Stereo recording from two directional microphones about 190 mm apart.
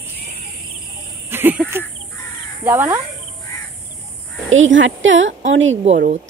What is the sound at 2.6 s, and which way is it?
Speech, 15° right (ahead or behind).